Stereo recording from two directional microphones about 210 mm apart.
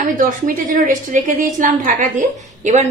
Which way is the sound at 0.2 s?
40° right (ahead or behind).